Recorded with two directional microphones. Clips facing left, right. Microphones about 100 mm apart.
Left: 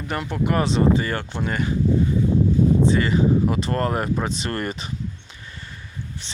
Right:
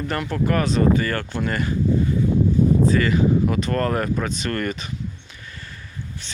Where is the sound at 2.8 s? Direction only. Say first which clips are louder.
Even; 25° left (ahead or behind).